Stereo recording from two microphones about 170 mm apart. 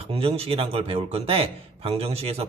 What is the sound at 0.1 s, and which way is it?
Speech, 35° right (ahead or behind).